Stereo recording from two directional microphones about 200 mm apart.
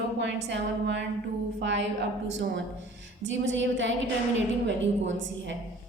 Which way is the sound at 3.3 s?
65° right (ahead or behind).